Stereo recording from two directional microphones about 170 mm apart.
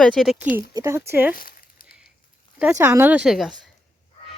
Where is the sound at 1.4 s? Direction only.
60° left (ahead or behind).